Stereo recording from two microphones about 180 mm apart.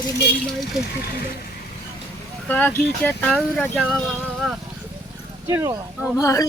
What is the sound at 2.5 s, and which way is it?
Speech, 10° left (ahead or behind).